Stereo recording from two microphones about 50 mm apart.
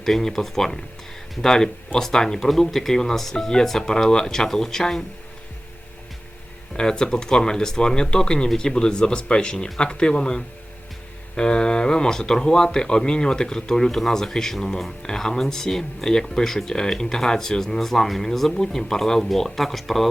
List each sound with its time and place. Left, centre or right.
0.0 s speech: centre
6.7 s speech: centre